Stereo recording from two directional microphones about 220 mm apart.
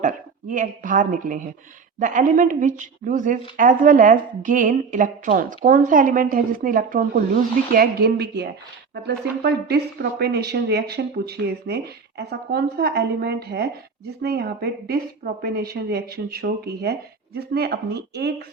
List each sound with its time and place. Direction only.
0.0 s a woman's voice: 35° right (ahead or behind)